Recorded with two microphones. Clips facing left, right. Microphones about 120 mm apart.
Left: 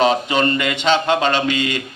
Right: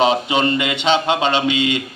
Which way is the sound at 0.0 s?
45° left (ahead or behind).